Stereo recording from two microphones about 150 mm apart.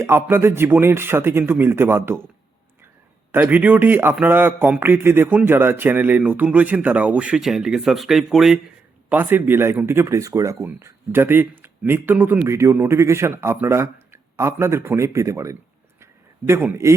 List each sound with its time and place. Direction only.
0.0 s speech: 15° right (ahead or behind)
3.3 s speech: 10° right (ahead or behind)
9.0 s speech: 15° right (ahead or behind)